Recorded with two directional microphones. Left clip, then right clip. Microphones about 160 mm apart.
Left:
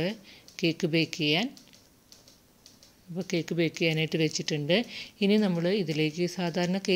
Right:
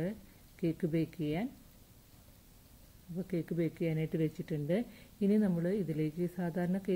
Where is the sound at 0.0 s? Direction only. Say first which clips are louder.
Left 8 dB; 30° left (ahead or behind).